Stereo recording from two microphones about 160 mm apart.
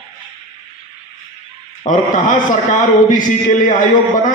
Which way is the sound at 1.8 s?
55° left (ahead or behind).